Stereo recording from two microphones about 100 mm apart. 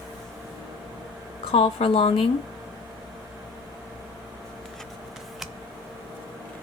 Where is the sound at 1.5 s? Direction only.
70° left (ahead or behind).